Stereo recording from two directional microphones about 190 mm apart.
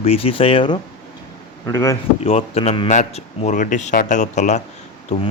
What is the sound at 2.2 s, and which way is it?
A man's voice, 30° left (ahead or behind).